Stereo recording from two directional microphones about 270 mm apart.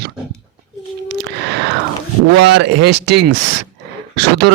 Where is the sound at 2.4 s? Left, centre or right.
Right.